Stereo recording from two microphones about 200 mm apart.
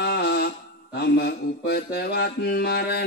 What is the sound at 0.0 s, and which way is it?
Mantra, 55° left (ahead or behind).